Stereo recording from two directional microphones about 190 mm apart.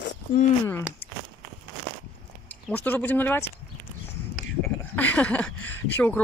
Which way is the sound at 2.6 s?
10° left (ahead or behind).